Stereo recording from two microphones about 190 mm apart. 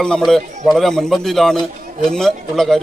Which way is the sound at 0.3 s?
Centre (ahead or behind).